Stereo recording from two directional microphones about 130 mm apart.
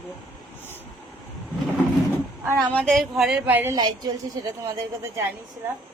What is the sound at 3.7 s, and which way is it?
A woman's voice, 30° right (ahead or behind).